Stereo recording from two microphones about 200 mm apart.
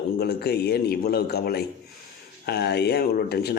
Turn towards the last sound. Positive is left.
turn(degrees=55)  # may be behind; listen again after turning